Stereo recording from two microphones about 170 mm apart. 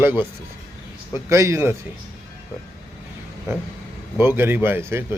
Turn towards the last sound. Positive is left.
turn(degrees=-15)  # may be behind; listen again after turning